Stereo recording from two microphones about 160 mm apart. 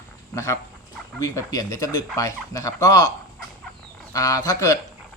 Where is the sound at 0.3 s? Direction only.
20° left (ahead or behind).